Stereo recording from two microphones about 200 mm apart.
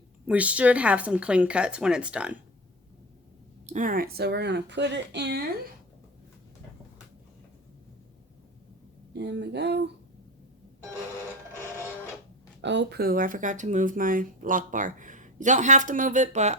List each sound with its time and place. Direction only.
0.3 s a woman's voice: 5° right (ahead or behind)
3.7 s speech: 40° right (ahead or behind); by 5.4 s 55° right (ahead or behind)
9.1 s speech: 60° right (ahead or behind)
12.6 s speech: 60° right (ahead or behind); by 16.6 s 35° right (ahead or behind)